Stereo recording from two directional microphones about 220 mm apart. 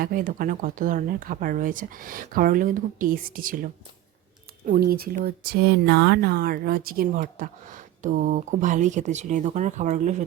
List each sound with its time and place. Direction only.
0.0 s speech: 40° right (ahead or behind)